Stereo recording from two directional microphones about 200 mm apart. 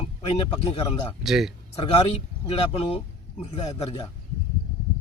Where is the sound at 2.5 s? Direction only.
30° left (ahead or behind).